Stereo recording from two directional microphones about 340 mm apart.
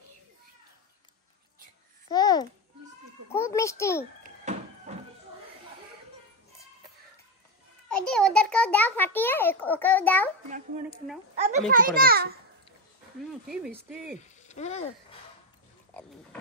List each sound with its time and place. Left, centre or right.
2.0 s babbling: centre
3.3 s a sound: centre
4.2 s thunk: right
7.9 s a child's voice: centre
11.3 s a child's voice: right
13.3 s speech: centre
14.2 s speech: centre
15.9 s dog: centre